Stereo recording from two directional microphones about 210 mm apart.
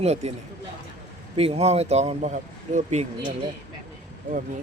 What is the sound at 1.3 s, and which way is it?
Speech, 30° right (ahead or behind).